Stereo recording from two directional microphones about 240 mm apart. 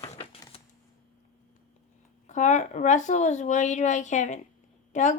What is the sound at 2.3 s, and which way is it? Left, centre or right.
Speech, left.